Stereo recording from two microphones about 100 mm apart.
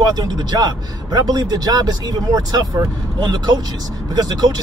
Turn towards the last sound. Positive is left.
turn(degrees=-45)  # may be behind; listen again after turning